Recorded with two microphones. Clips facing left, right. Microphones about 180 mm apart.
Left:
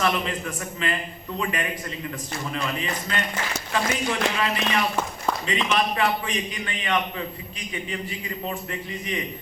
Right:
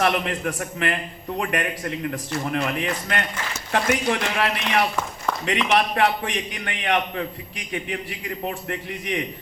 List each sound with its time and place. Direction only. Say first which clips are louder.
0.0 s a man's voice: right 3 dB; 60° right (ahead or behind)